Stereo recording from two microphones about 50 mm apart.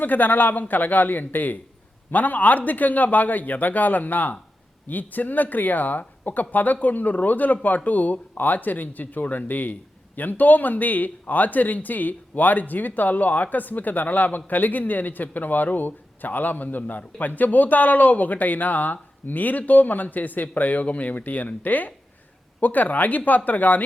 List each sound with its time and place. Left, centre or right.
0.0 s speech: left